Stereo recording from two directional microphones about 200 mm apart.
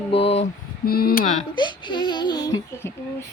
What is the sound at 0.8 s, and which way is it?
Speech, 50° left (ahead or behind).